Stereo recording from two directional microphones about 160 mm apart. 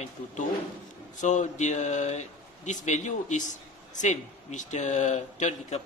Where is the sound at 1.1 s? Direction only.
50° left (ahead or behind).